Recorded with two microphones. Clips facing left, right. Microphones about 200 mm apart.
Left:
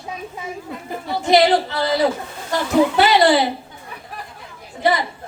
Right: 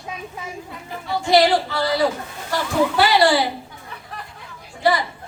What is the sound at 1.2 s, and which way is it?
A woman's voice, 20° left (ahead or behind).